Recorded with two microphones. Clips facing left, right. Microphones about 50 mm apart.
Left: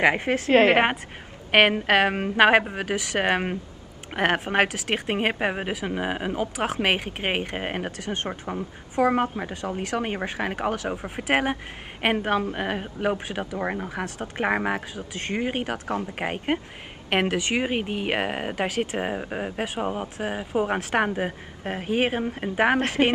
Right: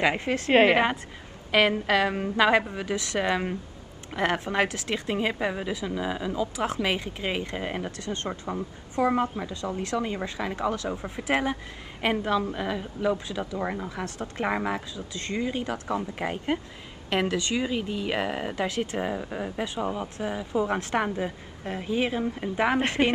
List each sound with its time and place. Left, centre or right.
0.0 s speech: left
8.1 s speech: left
9.0 s speech: left
13.6 s speech: left